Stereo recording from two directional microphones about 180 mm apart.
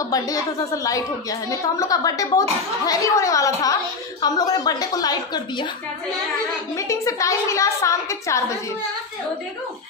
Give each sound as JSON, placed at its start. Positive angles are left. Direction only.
{"t": 0.0, "sound": "a woman's voice", "side_deg": 20}
{"t": 1.5, "sound": "a woman's voice", "side_deg": 20}
{"t": 6.8, "sound": "a woman's voice", "side_deg": 15}